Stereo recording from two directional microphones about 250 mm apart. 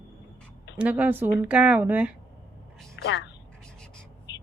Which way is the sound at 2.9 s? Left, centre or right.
Left.